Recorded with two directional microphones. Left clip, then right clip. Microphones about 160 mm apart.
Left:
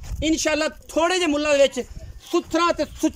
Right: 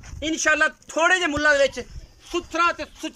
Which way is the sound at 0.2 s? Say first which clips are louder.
Right 1 dB; 20° left (ahead or behind).